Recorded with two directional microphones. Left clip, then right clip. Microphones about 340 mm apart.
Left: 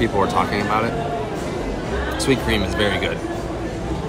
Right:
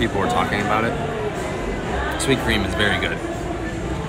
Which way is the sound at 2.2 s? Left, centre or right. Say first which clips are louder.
Left 1 dB; centre.